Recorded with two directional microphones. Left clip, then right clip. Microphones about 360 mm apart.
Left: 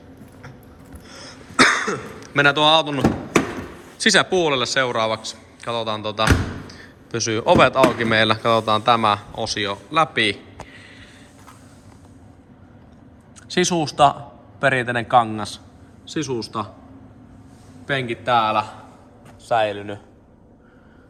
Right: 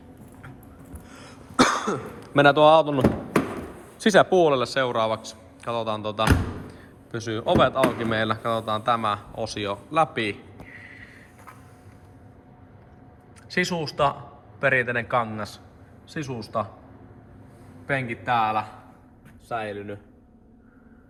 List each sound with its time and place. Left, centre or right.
1.0 s throat clearing: centre
4.0 s speech: centre
13.5 s a man's voice: centre
17.8 s speech: centre
19.5 s speech: left